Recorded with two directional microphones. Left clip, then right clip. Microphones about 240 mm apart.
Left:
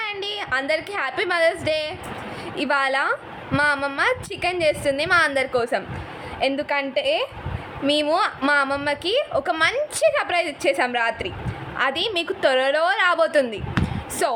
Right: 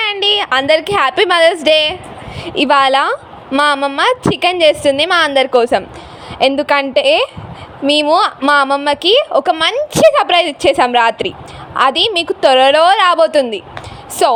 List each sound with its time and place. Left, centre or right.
0.0 s a woman's voice: right